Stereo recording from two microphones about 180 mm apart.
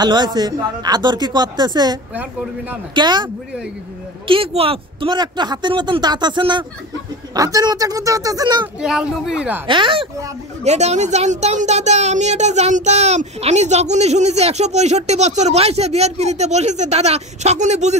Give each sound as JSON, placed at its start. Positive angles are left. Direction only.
{"t": 0.0, "sound": "speech", "side_deg": -25}
{"t": 4.3, "sound": "speech", "side_deg": -30}
{"t": 8.8, "sound": "speech", "side_deg": -5}
{"t": 9.7, "sound": "speech", "side_deg": -30}
{"t": 10.6, "sound": "a child's voice", "side_deg": -40}